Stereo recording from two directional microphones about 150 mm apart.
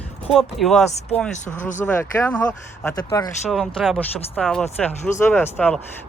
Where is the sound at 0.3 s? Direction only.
Centre (ahead or behind).